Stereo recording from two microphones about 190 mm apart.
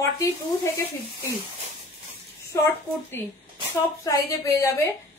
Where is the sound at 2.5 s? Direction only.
15° left (ahead or behind).